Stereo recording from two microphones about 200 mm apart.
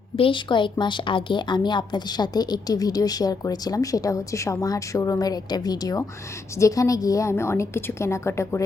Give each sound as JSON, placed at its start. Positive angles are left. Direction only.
{"t": 0.2, "sound": "a woman's voice", "side_deg": 25}